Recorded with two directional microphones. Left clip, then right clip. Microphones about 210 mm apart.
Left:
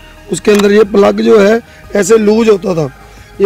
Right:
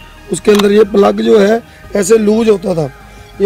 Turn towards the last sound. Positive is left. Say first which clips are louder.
# left 2 dB
turn(degrees=40)  # may be behind; listen again after turning